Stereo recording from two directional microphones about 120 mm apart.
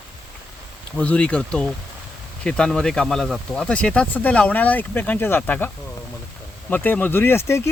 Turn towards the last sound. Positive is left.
turn(degrees=20)  # may be behind; listen again after turning